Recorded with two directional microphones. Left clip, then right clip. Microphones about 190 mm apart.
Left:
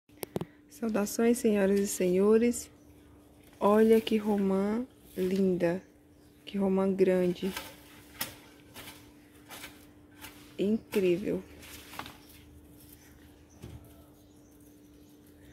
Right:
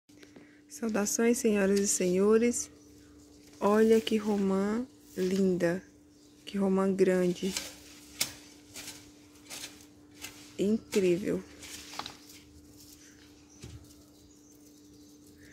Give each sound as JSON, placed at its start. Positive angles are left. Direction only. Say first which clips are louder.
{"t": 0.7, "sound": "speech", "louder": "even", "side_deg": 0}
{"t": 10.5, "sound": "speech", "louder": "right 1 dB", "side_deg": -5}
{"t": 12.0, "sound": "a sound", "louder": "right 2 dB", "side_deg": 55}